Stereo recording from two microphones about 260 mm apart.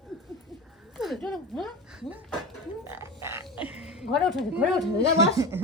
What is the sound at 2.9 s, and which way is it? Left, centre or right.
Music, centre.